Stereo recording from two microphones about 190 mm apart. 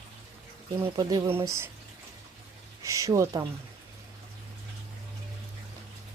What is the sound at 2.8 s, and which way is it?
Speech, 15° right (ahead or behind).